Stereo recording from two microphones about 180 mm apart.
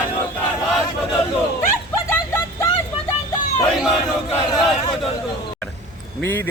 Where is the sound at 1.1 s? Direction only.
15° left (ahead or behind).